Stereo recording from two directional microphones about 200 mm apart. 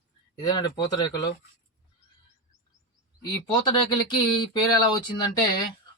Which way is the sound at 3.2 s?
20° left (ahead or behind).